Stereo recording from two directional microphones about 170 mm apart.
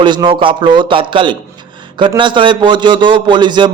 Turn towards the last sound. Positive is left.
turn(degrees=-25)  # may be behind; listen again after turning